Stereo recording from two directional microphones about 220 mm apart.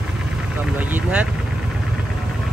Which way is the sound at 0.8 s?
5° right (ahead or behind).